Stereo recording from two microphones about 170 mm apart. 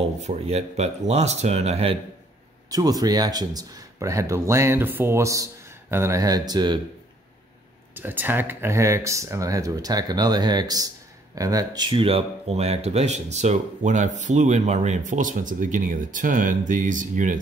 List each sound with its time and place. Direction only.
0.2 s speech: 40° right (ahead or behind)
2.7 s speech: 20° right (ahead or behind)
7.9 s speech: 10° right (ahead or behind); by 17.4 s 50° right (ahead or behind)